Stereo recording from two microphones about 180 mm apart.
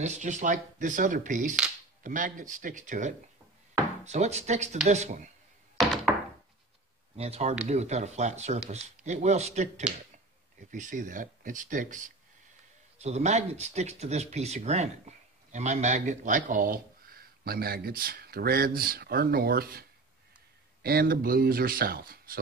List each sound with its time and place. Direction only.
0.0 s speech: 40° right (ahead or behind)
7.2 s speech: 35° right (ahead or behind); by 22.4 s 55° right (ahead or behind)